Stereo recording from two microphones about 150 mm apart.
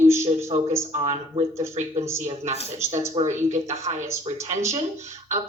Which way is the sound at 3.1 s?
50° right (ahead or behind).